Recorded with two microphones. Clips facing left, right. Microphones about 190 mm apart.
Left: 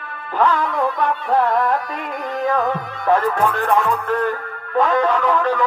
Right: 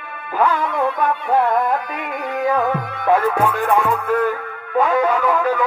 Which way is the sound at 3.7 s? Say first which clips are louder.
Right 1 dB; 55° right (ahead or behind).